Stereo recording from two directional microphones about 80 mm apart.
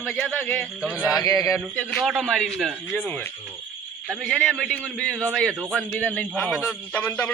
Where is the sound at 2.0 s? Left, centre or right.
Centre.